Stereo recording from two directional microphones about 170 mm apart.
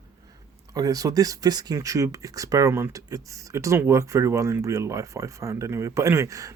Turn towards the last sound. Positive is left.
turn(degrees=-20)  # may be behind; listen again after turning